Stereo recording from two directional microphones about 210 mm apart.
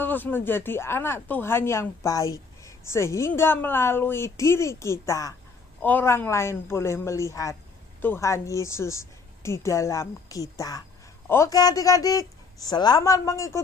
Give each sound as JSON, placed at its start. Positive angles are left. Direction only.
{"t": 0.0, "sound": "speech", "side_deg": 10}